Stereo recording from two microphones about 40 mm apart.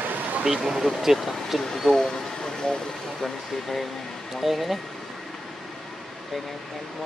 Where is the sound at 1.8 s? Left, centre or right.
Centre.